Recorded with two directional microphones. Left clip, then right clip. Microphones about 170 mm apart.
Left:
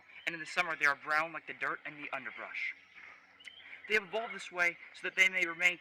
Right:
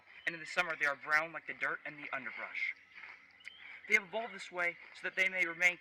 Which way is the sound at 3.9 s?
15° left (ahead or behind).